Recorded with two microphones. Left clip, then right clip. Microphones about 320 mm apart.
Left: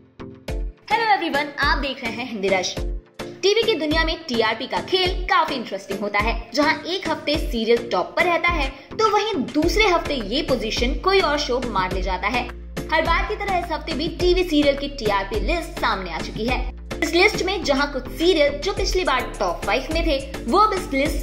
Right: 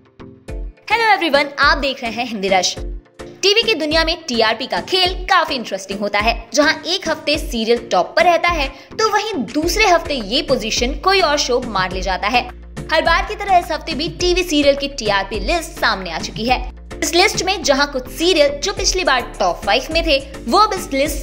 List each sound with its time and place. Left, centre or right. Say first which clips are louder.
0.8 s a woman's voice: right 5 dB; right
9.8 s a woman's voice: right 5 dB; right